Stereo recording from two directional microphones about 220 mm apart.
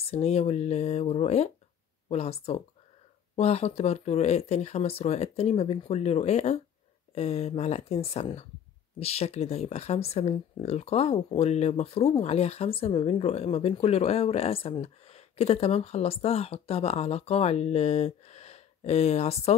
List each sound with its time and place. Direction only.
0.0 s speech: 30° left (ahead or behind)